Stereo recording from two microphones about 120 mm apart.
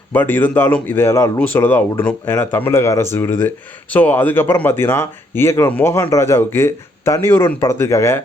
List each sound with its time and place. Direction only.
0.1 s speech: 15° left (ahead or behind)